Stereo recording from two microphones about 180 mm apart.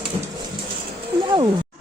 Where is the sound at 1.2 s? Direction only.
25° right (ahead or behind).